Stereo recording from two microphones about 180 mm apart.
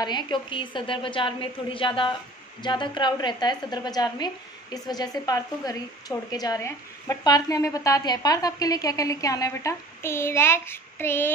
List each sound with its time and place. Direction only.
0.0 s a woman's voice: 25° left (ahead or behind)